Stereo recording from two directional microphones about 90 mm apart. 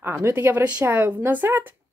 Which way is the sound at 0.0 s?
25° right (ahead or behind).